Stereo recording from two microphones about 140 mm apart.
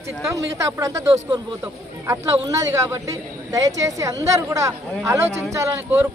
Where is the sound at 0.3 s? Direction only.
25° right (ahead or behind).